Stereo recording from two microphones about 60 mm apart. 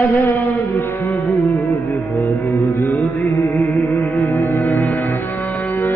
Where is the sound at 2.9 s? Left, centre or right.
Left.